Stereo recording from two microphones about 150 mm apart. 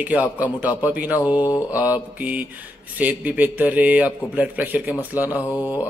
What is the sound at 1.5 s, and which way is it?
Mantra, 20° left (ahead or behind).